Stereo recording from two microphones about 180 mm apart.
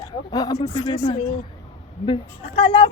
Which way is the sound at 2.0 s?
30° left (ahead or behind).